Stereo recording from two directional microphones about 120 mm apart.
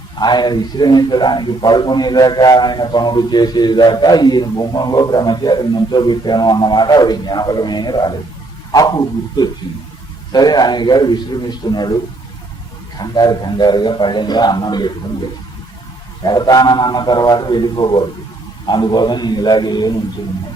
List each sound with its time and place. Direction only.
0.2 s a man's voice: 35° left (ahead or behind)
13.0 s a man's voice: 35° left (ahead or behind)
16.2 s a man's voice: 35° left (ahead or behind)